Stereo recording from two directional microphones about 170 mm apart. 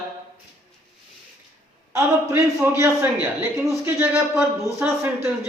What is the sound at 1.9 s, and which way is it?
A man's voice, 15° right (ahead or behind).